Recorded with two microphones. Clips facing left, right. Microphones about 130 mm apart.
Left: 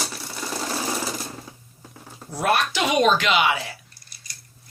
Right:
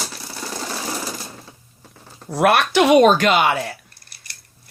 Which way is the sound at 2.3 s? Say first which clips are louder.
Right 6 dB; 75° right (ahead or behind).